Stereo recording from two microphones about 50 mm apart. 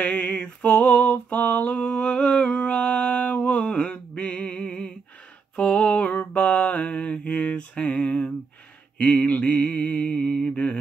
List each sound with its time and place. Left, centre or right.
0.0 s a sound: left
5.6 s lullaby: left
6.3 s mantra: left
7.4 s a sound: centre
9.2 s mantra: left
10.0 s mantra: centre